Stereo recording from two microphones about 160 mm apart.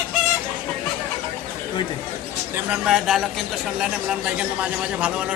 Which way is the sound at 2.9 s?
Centre (ahead or behind).